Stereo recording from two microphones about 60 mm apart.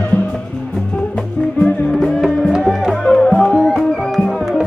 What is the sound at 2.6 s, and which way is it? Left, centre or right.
Music, centre.